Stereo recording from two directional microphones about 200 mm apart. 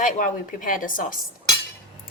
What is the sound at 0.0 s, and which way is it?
A woman's voice, 40° left (ahead or behind).